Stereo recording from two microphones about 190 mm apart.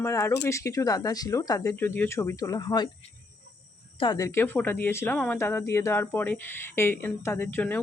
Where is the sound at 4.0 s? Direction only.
20° left (ahead or behind).